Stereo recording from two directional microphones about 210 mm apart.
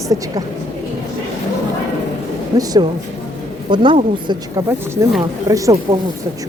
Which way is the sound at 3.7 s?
20° right (ahead or behind).